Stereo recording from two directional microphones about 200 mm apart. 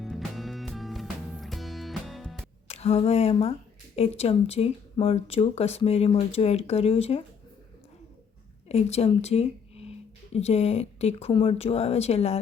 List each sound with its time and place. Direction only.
0.0 s music: centre (ahead or behind)
2.6 s speech: 30° left (ahead or behind)
8.7 s speech: 30° left (ahead or behind)